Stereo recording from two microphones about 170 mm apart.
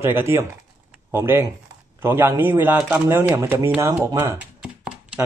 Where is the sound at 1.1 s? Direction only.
15° right (ahead or behind).